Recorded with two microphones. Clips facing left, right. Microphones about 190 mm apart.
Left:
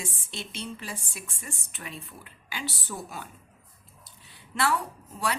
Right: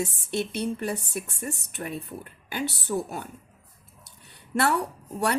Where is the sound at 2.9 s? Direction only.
35° right (ahead or behind).